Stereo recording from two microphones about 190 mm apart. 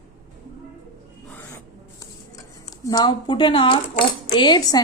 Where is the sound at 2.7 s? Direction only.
20° left (ahead or behind).